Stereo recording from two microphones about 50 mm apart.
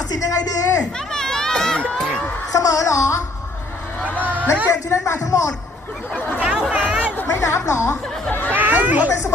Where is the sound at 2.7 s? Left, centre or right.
Left.